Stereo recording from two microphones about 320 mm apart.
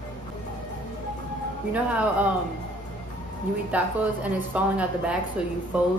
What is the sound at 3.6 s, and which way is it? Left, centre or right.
A woman's voice, centre.